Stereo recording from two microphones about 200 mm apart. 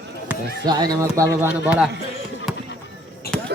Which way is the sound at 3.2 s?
50° left (ahead or behind).